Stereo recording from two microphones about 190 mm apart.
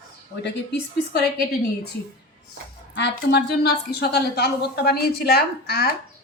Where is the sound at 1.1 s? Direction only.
60° left (ahead or behind).